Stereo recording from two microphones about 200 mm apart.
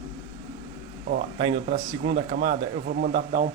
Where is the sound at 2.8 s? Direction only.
50° right (ahead or behind).